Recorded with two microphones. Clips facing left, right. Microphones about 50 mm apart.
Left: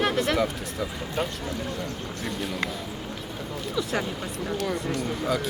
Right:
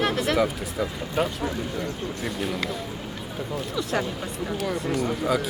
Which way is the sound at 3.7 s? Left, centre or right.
Centre.